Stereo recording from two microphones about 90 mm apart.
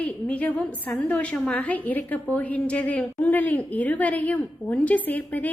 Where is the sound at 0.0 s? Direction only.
15° left (ahead or behind).